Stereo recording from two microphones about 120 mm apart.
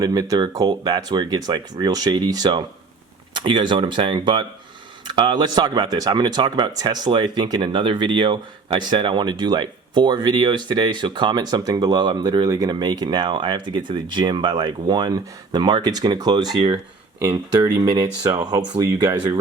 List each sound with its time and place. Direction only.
0.0 s speech: 30° right (ahead or behind)